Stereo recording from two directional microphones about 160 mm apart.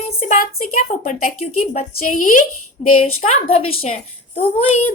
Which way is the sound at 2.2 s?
55° left (ahead or behind).